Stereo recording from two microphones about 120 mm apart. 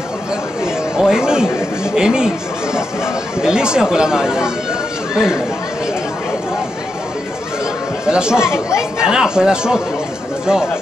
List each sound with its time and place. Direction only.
0.9 s speech: 5° right (ahead or behind)
8.0 s speech: 5° right (ahead or behind)